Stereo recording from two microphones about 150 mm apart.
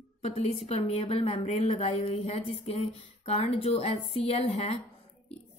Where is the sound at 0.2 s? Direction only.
45° left (ahead or behind).